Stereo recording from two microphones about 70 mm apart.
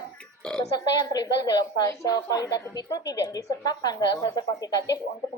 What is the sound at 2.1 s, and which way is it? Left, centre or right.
A woman's voice, left.